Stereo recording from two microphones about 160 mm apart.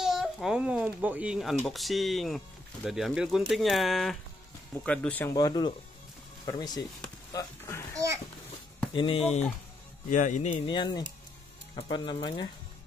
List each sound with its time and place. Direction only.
0.0 s babbling: centre (ahead or behind)
1.7 s speech: centre (ahead or behind)
5.3 s speech: 25° left (ahead or behind)
8.9 s speech: 35° left (ahead or behind); by 10.5 s 50° left (ahead or behind)
10.7 s speech: 30° left (ahead or behind)